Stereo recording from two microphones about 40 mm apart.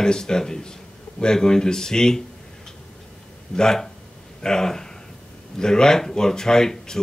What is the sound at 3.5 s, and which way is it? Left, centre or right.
Speech, centre.